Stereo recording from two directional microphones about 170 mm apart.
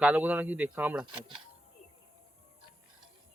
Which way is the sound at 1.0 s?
25° right (ahead or behind).